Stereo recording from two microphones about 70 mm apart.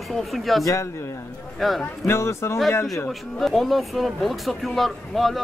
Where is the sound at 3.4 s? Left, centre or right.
Centre.